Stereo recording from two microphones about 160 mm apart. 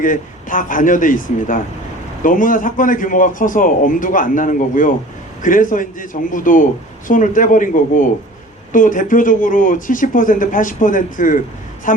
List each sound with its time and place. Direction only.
0.0 s a man's voice: 55° left (ahead or behind)